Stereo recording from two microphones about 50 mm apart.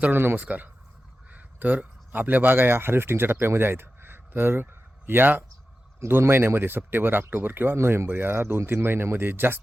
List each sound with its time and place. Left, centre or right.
0.1 s speech: right
0.3 s speech: right
7.8 s speech: right